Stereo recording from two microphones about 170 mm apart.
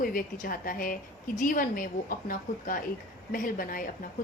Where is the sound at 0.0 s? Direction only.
55° left (ahead or behind).